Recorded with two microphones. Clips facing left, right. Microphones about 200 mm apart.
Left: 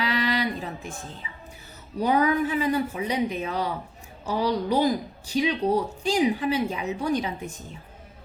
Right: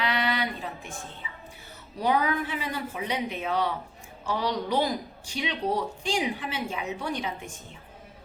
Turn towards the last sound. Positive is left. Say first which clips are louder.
# left 3 dB
turn(degrees=40)  # may be behind; listen again after turning